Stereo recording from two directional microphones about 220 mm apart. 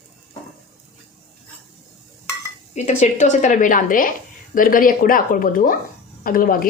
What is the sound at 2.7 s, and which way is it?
Speech, 30° left (ahead or behind).